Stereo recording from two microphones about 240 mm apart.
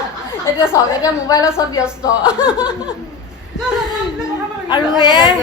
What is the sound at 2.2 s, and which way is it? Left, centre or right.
Speech, centre.